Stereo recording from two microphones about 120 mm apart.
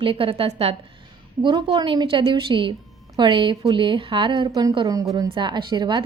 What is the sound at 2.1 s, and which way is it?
A woman's voice, 50° right (ahead or behind).